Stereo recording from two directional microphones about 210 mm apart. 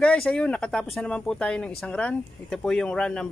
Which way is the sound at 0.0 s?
5° left (ahead or behind).